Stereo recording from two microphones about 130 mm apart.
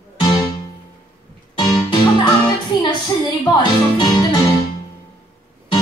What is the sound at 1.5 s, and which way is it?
Music, 40° left (ahead or behind).